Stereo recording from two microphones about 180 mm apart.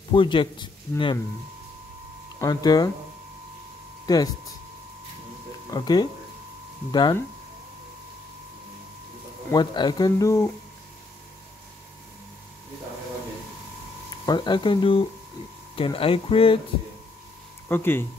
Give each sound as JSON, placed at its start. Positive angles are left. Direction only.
{"t": 0.1, "sound": "speech", "side_deg": 25}
{"t": 2.3, "sound": "speech", "side_deg": 20}
{"t": 4.0, "sound": "a sound", "side_deg": 20}
{"t": 5.7, "sound": "speech", "side_deg": 20}
{"t": 9.5, "sound": "speech", "side_deg": 25}
{"t": 14.2, "sound": "speech", "side_deg": 25}
{"t": 17.6, "sound": "speech", "side_deg": 10}